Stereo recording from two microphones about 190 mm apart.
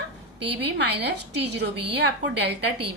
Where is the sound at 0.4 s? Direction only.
65° right (ahead or behind).